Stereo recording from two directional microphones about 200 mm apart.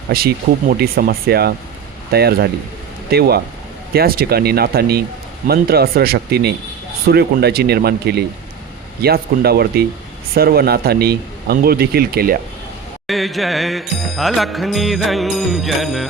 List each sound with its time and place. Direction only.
0.1 s speech: 50° right (ahead or behind)
13.1 s music: centre (ahead or behind)